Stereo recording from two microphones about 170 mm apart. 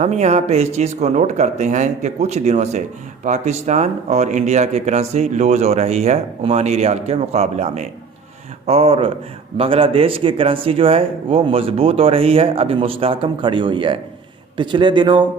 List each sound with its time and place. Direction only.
0.0 s a man's voice: 40° right (ahead or behind)